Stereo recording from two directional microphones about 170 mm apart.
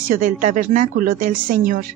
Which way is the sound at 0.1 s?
50° right (ahead or behind).